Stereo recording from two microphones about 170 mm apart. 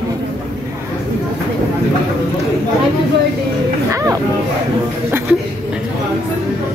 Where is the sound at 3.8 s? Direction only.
20° right (ahead or behind).